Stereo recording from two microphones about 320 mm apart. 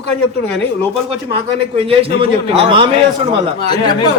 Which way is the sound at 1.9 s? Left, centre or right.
Centre.